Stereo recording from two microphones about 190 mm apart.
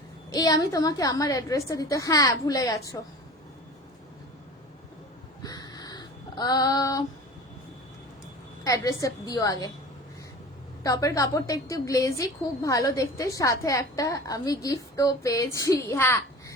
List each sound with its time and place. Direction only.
0.3 s a woman's voice: 20° left (ahead or behind)
5.4 s a sound: 20° left (ahead or behind)
8.6 s a woman's voice: 15° left (ahead or behind)
10.8 s a woman's voice: 15° left (ahead or behind)